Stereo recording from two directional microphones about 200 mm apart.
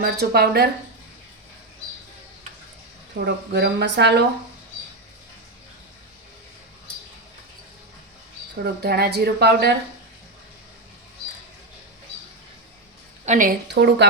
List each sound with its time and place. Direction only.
0.0 s speech: 50° right (ahead or behind)
3.2 s speech: 55° right (ahead or behind)
8.6 s speech: 55° right (ahead or behind)
13.2 s a woman's voice: 35° right (ahead or behind)
13.7 s speech: 60° right (ahead or behind)